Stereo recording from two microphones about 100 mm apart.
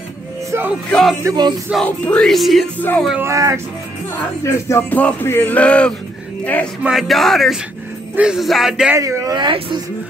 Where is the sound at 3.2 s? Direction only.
30° right (ahead or behind).